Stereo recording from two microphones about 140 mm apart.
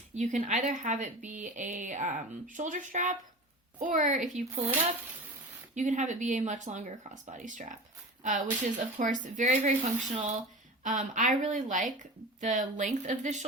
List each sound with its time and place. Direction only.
0.1 s a woman's voice: 60° right (ahead or behind)
4.4 s speech: 50° right (ahead or behind)
5.7 s speech: 60° right (ahead or behind)